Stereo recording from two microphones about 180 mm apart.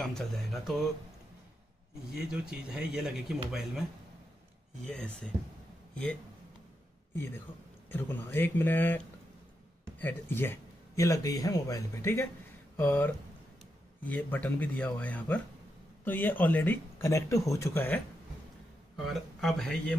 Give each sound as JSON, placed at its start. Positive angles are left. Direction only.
{"t": 0.0, "sound": "speech", "side_deg": 0}
{"t": 2.1, "sound": "speech", "side_deg": -5}
{"t": 4.8, "sound": "speech", "side_deg": 5}
{"t": 7.9, "sound": "speech", "side_deg": 10}
{"t": 12.7, "sound": "a sound", "side_deg": 10}
{"t": 14.0, "sound": "speech", "side_deg": 10}
{"t": 19.0, "sound": "speech", "side_deg": 0}